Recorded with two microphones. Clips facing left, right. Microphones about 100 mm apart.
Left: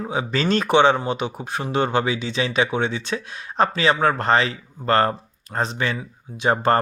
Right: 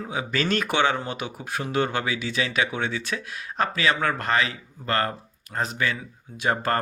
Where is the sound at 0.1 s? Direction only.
30° left (ahead or behind).